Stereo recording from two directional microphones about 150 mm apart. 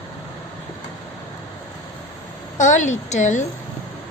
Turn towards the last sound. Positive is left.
turn(degrees=55)  # may be behind; listen again after turning